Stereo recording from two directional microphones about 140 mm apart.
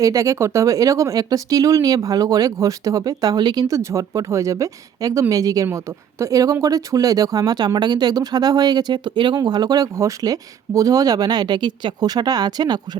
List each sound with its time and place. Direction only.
0.0 s speech: 25° right (ahead or behind)